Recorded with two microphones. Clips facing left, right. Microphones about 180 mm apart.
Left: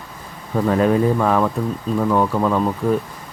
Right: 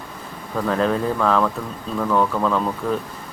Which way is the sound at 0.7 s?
10° left (ahead or behind).